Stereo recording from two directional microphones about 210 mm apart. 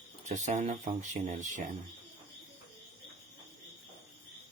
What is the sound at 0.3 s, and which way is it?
Speech, 35° right (ahead or behind).